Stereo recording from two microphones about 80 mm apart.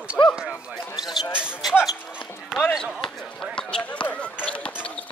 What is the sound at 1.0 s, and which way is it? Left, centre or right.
Basketball bounce, left.